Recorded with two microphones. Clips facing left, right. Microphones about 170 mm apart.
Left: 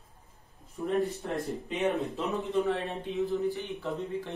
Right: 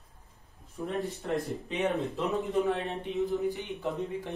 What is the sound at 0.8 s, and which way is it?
Speech, centre (ahead or behind).